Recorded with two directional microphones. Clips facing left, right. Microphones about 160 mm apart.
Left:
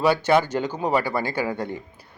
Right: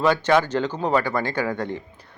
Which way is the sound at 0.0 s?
10° left (ahead or behind).